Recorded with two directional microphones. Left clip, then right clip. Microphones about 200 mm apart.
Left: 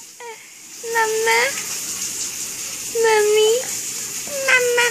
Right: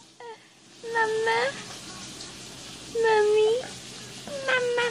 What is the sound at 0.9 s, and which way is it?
Speech, 20° left (ahead or behind).